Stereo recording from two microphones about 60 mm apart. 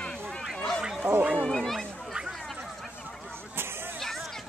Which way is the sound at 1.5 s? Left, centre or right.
Centre.